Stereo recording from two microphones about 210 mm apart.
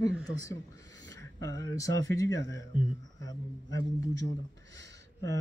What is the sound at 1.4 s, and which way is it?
A man's voice, 15° left (ahead or behind).